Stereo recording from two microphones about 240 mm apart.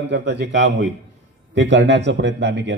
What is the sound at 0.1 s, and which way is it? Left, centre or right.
Speech, right.